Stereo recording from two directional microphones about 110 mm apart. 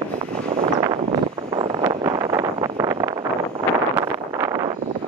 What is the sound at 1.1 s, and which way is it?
Vehicle, 50° right (ahead or behind).